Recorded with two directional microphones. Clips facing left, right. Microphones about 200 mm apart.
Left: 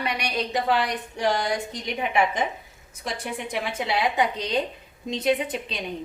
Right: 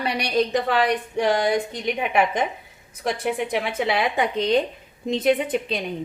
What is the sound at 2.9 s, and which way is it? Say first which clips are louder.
A woman's voice: right 7 dB; 60° right (ahead or behind).